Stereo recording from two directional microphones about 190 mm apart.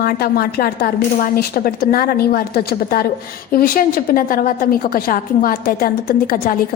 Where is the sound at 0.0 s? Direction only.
55° left (ahead or behind).